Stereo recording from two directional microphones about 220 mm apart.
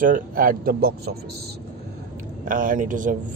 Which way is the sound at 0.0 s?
40° right (ahead or behind).